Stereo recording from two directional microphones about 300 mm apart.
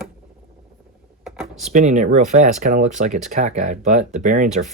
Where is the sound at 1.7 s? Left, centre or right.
Right.